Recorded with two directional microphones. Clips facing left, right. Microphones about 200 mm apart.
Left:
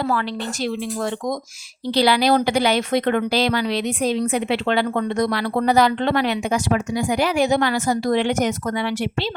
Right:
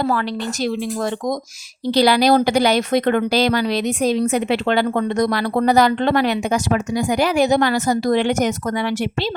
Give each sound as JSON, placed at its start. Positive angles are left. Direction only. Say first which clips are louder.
{"t": 0.0, "sound": "speech", "louder": "right 2 dB", "side_deg": -40}